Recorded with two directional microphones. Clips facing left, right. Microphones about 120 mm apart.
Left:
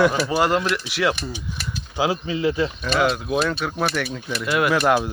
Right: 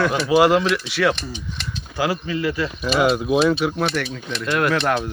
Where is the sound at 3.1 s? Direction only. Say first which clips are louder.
Right 5 dB; 20° right (ahead or behind).